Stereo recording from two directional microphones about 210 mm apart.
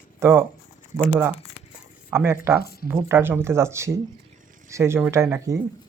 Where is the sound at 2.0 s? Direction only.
10° right (ahead or behind).